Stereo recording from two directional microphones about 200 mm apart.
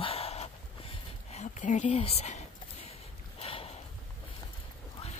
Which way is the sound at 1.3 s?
35° left (ahead or behind).